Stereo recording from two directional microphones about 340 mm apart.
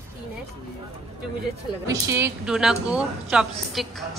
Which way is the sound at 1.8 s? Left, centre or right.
Centre.